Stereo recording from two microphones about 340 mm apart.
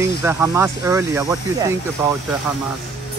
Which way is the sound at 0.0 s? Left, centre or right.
Centre.